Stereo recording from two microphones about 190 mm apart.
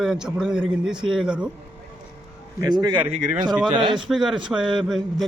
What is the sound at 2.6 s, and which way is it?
A man's voice, 20° right (ahead or behind).